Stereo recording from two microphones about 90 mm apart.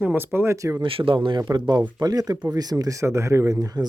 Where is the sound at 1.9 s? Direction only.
45° right (ahead or behind).